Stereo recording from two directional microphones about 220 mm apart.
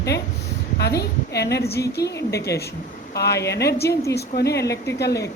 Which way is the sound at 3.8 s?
15° left (ahead or behind).